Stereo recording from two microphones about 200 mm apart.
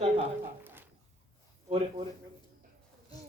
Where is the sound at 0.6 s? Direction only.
10° right (ahead or behind).